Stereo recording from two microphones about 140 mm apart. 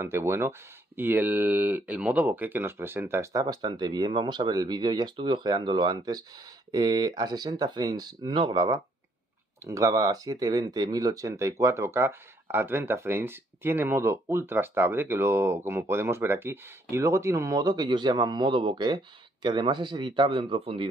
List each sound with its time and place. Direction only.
0.0 s speech: 20° right (ahead or behind); by 20.9 s 40° right (ahead or behind)